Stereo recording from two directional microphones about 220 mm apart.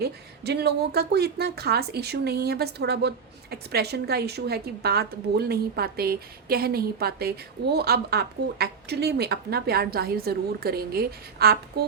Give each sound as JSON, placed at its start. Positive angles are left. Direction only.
{"t": 0.0, "sound": "a woman's voice", "side_deg": -45}